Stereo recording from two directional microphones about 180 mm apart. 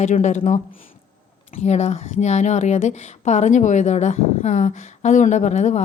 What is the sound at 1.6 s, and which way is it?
Speech, 40° left (ahead or behind).